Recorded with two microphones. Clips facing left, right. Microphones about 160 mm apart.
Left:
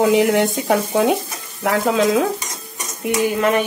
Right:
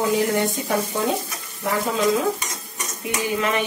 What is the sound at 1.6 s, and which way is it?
Stir, 90° left.